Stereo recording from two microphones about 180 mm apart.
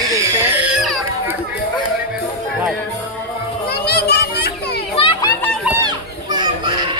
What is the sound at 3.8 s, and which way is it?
Children playing, 65° left (ahead or behind).